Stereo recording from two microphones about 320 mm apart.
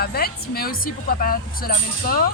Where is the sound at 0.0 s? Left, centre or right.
Left.